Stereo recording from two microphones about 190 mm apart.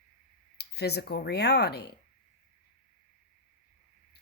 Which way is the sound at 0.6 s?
60° left (ahead or behind).